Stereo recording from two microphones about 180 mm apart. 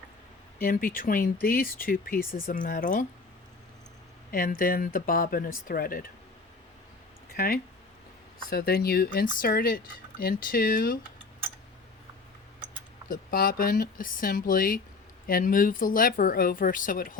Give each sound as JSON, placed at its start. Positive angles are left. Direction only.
{"t": 0.6, "sound": "speech", "side_deg": 50}
{"t": 4.3, "sound": "speech", "side_deg": 55}
{"t": 7.3, "sound": "speech", "side_deg": 55}
{"t": 13.1, "sound": "speech", "side_deg": 55}